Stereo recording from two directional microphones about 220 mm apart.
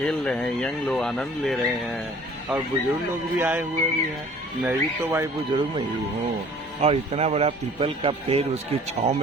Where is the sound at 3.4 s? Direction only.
10° right (ahead or behind).